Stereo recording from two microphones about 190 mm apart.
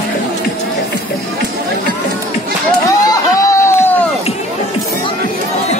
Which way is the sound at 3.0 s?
20° left (ahead or behind).